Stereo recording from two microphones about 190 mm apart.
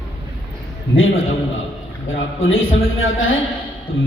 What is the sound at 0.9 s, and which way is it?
A man's voice, 90° left.